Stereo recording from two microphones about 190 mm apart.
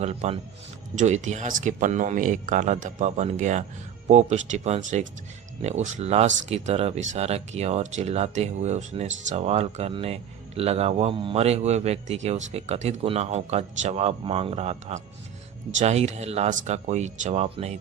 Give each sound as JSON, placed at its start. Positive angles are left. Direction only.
{"t": 0.0, "sound": "speech", "side_deg": -35}